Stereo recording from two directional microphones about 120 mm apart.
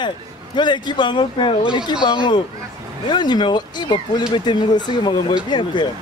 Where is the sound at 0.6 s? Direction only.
40° left (ahead or behind).